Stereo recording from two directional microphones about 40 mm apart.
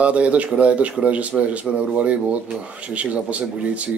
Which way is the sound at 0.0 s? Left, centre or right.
Right.